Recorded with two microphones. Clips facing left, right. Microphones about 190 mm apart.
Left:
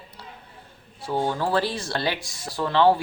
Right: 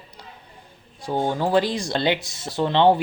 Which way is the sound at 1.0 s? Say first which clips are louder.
Right 2 dB; 15° right (ahead or behind).